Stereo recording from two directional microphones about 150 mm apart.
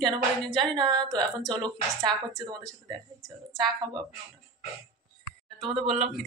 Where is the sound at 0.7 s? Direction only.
30° right (ahead or behind).